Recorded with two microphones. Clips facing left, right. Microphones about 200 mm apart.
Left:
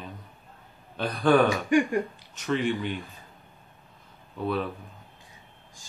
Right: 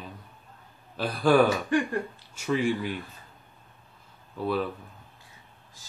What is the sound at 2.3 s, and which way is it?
Speech, 10° right (ahead or behind).